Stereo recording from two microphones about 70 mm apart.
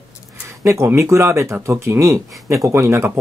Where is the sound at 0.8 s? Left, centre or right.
Right.